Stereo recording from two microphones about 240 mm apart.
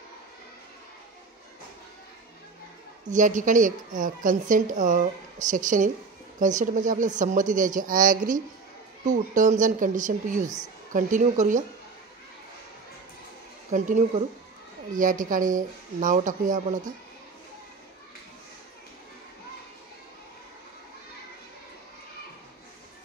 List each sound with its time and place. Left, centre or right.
3.1 s speech: right
13.7 s speech: right